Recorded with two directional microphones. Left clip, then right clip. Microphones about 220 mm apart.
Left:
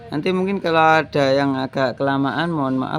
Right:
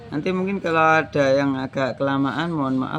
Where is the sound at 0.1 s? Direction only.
45° left (ahead or behind).